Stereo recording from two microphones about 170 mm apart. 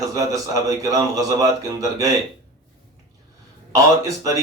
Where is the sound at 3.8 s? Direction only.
20° right (ahead or behind).